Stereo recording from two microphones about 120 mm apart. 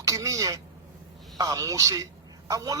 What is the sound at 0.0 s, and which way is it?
A man's voice, 30° right (ahead or behind).